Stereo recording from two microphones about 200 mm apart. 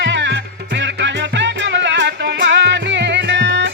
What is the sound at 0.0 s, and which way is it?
Music, 60° right (ahead or behind).